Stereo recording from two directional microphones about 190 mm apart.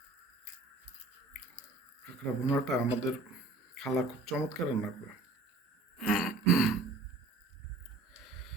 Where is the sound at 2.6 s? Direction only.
Centre (ahead or behind).